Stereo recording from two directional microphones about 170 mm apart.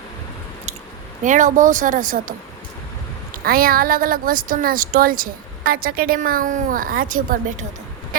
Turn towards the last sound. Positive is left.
turn(degrees=-50)  # may be behind; listen again after turning